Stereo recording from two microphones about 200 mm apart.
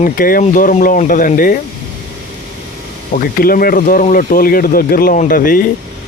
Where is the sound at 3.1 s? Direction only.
45° left (ahead or behind).